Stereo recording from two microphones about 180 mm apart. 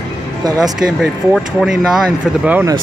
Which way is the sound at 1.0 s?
Centre (ahead or behind).